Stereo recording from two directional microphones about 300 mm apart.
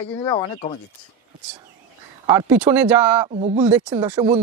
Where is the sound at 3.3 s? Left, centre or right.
Right.